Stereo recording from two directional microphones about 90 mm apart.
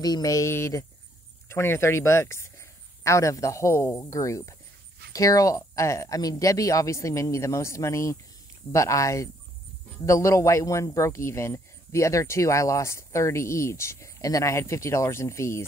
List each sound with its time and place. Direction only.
0.0 s speech: 45° left (ahead or behind)